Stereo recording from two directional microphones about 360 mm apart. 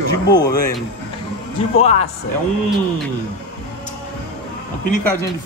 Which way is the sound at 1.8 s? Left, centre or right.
Centre.